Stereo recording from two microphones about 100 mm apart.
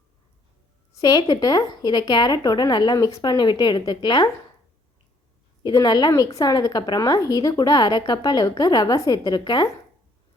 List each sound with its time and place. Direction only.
0.9 s a woman's voice: 40° left (ahead or behind)
5.6 s a woman's voice: 45° left (ahead or behind)